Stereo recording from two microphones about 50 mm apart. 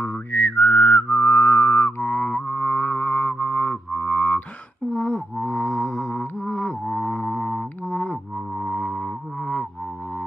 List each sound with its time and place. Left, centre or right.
0.0 s music: left; by 9.7 s centre